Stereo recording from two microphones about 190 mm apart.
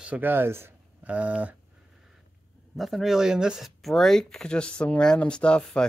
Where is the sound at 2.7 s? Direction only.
Centre (ahead or behind).